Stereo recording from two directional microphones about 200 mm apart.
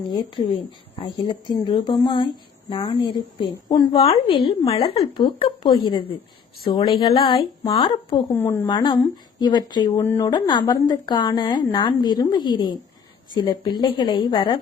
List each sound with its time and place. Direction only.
0.1 s speech: 20° left (ahead or behind)